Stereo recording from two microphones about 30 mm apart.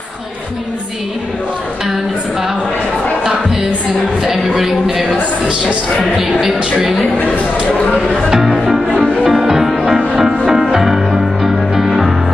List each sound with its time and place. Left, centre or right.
4.3 s speech: centre
8.3 s speech: centre
9.3 s music: centre